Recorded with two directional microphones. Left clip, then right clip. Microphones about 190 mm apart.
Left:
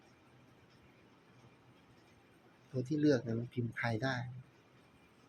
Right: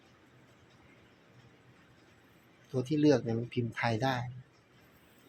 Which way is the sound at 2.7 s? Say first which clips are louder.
Right 5 dB; centre (ahead or behind).